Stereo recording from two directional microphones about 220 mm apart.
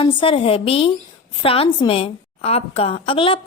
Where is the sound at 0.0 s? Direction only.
25° left (ahead or behind).